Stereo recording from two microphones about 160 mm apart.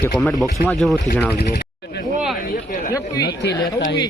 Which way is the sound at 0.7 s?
Centre (ahead or behind).